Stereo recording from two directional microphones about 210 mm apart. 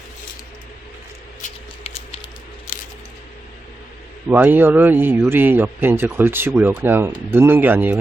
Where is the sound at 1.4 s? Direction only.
30° left (ahead or behind).